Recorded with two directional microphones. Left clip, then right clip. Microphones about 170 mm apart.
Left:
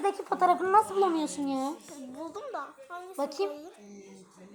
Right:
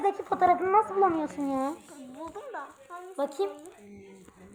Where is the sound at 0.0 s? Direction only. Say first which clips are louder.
Right 2 dB; 25° right (ahead or behind).